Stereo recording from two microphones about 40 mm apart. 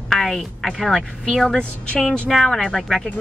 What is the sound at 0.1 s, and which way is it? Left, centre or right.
A woman's voice, centre.